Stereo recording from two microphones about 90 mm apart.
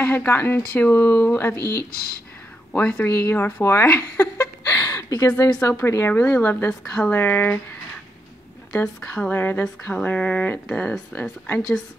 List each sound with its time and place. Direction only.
0.0 s speech: 20° left (ahead or behind)
2.7 s speech: 15° left (ahead or behind)
3.1 s speech: 25° left (ahead or behind)
4.7 s a sound: 40° left (ahead or behind)
5.5 s speech: 20° left (ahead or behind)
6.1 s speech: 15° left (ahead or behind)
6.7 s a woman's voice: 5° left (ahead or behind)
7.1 s speech: 20° left (ahead or behind)
8.7 s speech: 10° left (ahead or behind)
9.3 s speech: 25° left (ahead or behind)